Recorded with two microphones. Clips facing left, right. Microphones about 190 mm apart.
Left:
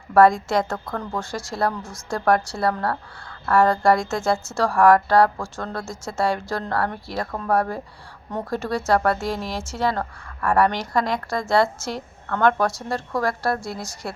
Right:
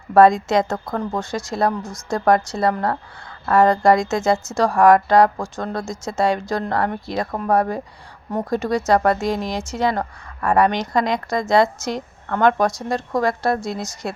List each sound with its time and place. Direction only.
0.1 s a woman's voice: 20° right (ahead or behind)